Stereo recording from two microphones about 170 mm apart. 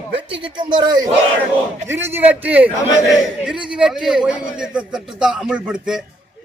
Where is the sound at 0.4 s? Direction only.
25° right (ahead or behind).